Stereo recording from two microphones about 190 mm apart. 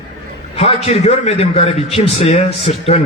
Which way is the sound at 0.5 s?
35° left (ahead or behind).